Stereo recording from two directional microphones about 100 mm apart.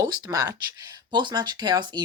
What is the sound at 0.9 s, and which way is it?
Speech, 45° right (ahead or behind).